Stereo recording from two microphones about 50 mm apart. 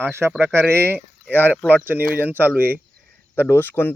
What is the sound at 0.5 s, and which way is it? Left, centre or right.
Speech, right.